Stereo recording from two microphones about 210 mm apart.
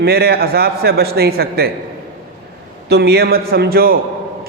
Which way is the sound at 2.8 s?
50° right (ahead or behind).